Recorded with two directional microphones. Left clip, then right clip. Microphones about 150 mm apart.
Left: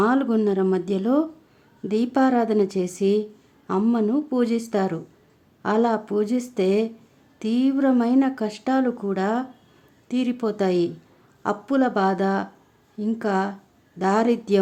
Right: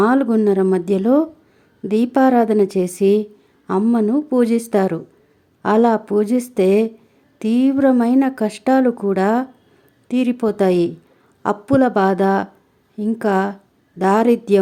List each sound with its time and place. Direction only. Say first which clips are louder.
0.0 s speech: right 5 dB; 25° right (ahead or behind)